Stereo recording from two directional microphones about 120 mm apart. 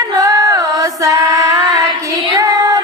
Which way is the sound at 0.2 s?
30° right (ahead or behind).